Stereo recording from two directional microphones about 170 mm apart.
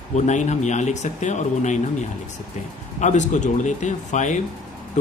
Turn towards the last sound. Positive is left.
turn(degrees=45)  # may be behind; listen again after turning